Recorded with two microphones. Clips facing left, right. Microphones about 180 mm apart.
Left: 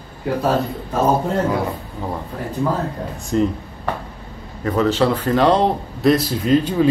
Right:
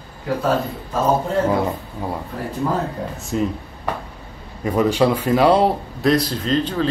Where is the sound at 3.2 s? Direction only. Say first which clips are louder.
Left 4 dB; centre (ahead or behind).